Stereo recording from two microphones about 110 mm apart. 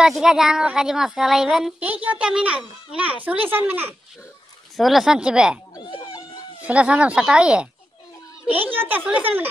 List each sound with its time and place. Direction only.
0.0 s a woman's voice: 5° right (ahead or behind)
1.8 s a child's voice: 15° right (ahead or behind)
4.7 s a woman's voice: centre (ahead or behind)
6.6 s a child's voice: 10° right (ahead or behind)